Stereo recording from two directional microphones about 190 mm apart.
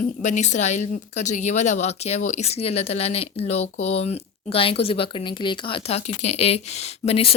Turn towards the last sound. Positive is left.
turn(degrees=30)  # may be behind; listen again after turning